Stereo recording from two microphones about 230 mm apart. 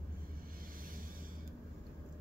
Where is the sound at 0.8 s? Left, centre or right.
Right.